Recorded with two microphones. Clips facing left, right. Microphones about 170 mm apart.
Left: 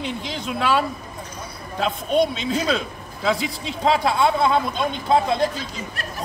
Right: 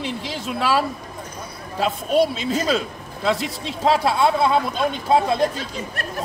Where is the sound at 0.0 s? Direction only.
5° right (ahead or behind).